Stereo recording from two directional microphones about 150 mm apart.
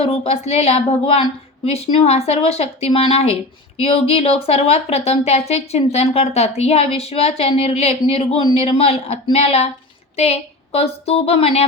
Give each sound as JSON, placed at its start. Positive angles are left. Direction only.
{"t": 0.0, "sound": "speech", "side_deg": 40}